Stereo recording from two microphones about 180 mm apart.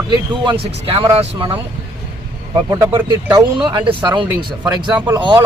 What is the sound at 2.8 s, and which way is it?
Speech, 15° right (ahead or behind).